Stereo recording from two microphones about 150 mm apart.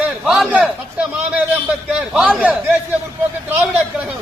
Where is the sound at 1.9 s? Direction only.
5° right (ahead or behind).